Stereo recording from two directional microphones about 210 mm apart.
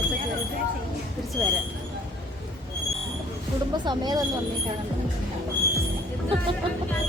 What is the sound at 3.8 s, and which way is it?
Speech, 20° right (ahead or behind).